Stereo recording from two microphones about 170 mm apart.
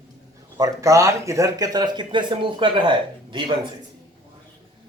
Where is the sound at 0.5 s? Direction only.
20° right (ahead or behind).